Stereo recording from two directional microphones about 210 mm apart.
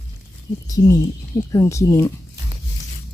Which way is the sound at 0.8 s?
20° left (ahead or behind).